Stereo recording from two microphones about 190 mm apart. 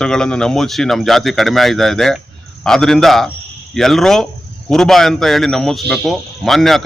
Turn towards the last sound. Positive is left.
turn(degrees=0)  # may be behind; listen again after turning